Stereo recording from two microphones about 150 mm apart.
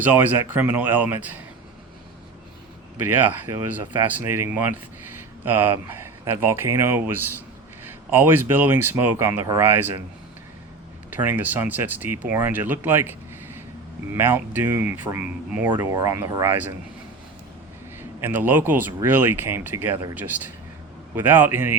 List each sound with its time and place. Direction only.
0.0 s speech: 10° right (ahead or behind)
3.1 s speech: 10° right (ahead or behind)
11.1 s speech: 10° right (ahead or behind)
18.2 s speech: 15° right (ahead or behind)